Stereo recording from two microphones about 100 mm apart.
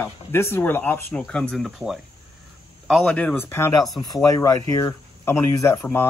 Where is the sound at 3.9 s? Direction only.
45° left (ahead or behind).